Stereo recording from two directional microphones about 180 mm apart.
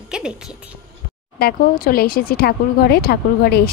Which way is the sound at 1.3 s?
60° left (ahead or behind).